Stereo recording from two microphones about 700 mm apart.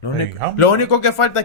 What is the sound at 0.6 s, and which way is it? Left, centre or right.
Speech, left.